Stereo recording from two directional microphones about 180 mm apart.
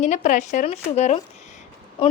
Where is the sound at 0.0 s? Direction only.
40° left (ahead or behind).